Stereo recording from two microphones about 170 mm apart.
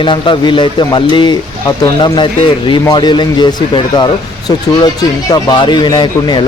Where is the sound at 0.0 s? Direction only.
30° left (ahead or behind).